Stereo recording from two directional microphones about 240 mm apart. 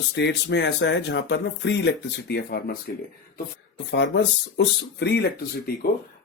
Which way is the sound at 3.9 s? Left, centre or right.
Left.